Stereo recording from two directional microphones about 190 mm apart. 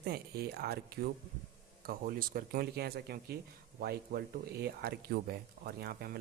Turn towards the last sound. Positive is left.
turn(degrees=-55)  # may be behind; listen again after turning